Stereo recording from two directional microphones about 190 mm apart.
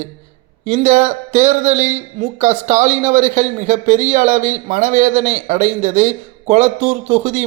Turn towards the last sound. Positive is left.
turn(degrees=-35)  # may be behind; listen again after turning